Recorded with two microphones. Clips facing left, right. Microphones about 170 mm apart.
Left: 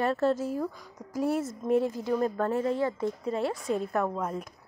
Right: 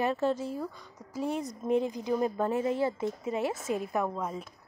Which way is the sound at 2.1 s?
10° right (ahead or behind).